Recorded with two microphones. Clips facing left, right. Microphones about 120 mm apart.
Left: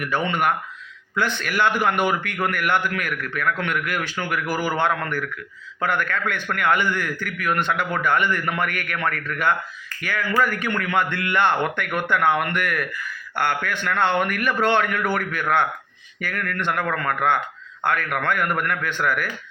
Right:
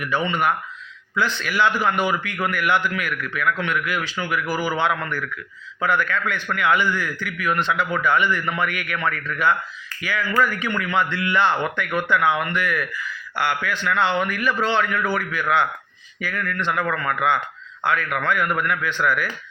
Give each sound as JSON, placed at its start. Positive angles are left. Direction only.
{"t": 0.0, "sound": "a man's voice", "side_deg": 50}